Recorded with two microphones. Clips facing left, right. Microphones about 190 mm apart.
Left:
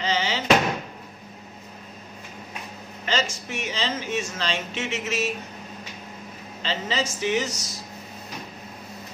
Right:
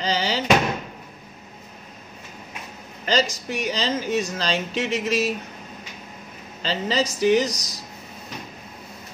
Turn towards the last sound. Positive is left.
turn(degrees=-40)  # may be behind; listen again after turning